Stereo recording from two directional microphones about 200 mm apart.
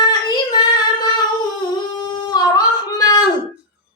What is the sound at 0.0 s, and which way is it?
Child singing, 20° left (ahead or behind).